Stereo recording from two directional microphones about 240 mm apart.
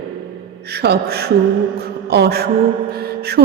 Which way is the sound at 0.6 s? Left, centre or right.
Right.